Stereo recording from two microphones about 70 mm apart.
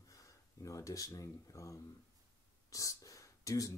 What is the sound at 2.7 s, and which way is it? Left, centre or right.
Whispering, left.